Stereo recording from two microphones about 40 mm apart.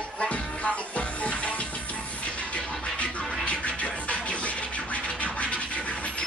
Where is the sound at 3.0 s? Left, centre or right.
Left.